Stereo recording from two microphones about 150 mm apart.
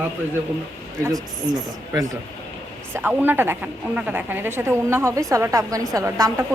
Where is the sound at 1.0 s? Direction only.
25° right (ahead or behind).